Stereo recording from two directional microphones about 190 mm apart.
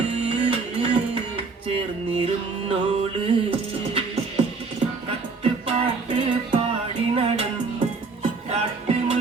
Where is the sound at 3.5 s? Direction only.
30° right (ahead or behind).